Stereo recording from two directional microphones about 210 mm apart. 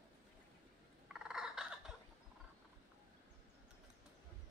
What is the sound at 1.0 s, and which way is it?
Fowl, 5° right (ahead or behind).